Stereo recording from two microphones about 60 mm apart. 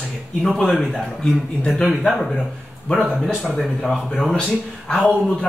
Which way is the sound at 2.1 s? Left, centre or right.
Centre.